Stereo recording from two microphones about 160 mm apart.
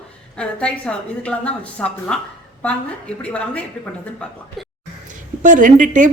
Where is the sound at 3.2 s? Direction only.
5° left (ahead or behind).